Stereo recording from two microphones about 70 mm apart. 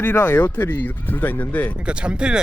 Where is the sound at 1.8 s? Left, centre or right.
Centre.